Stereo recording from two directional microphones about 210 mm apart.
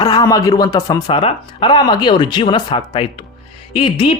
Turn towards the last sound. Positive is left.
turn(degrees=25)  # may be behind; listen again after turning